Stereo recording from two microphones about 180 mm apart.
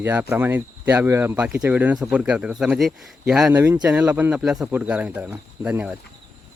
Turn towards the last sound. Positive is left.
turn(degrees=-10)  # may be behind; listen again after turning